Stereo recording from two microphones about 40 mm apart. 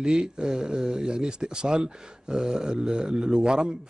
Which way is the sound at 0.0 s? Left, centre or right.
Right.